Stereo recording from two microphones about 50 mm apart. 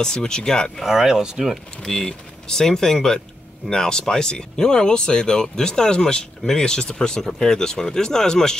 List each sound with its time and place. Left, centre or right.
0.0 s speech: centre
0.8 s speech: centre
1.8 s speech: centre